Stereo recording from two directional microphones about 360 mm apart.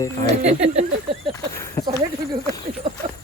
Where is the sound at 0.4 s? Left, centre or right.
Centre.